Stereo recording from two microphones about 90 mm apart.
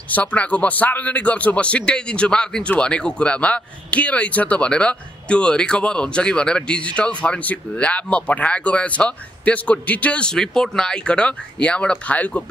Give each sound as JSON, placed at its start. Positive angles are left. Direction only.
{"t": 0.1, "sound": "a man's voice", "side_deg": 15}